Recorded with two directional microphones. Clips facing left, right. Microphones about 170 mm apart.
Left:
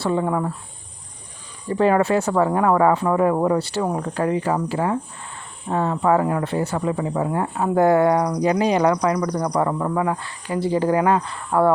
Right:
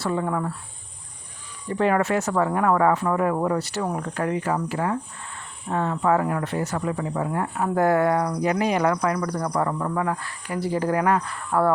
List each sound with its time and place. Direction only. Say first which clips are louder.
0.0 s speech: left 4 dB; 25° left (ahead or behind)
1.7 s speech: left 4 dB; 30° left (ahead or behind)